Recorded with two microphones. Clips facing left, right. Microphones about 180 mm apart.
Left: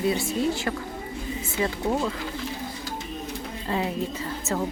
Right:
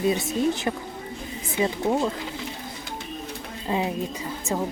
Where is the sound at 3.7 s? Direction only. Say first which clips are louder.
Right 1 dB; 15° right (ahead or behind).